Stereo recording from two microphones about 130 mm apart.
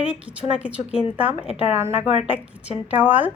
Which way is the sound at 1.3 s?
55° left (ahead or behind).